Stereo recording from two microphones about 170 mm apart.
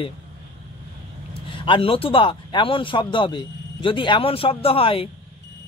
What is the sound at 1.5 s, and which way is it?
Speech, 30° left (ahead or behind).